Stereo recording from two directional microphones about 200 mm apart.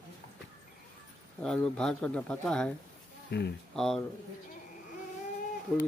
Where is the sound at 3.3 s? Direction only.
60° left (ahead or behind).